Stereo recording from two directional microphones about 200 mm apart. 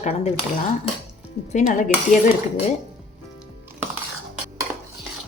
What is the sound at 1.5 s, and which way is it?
Dishes, 40° left (ahead or behind).